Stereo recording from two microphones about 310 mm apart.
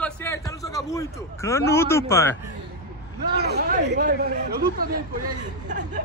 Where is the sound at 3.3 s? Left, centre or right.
Right.